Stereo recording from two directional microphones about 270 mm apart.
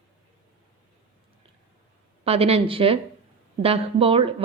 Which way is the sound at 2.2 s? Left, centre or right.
Right.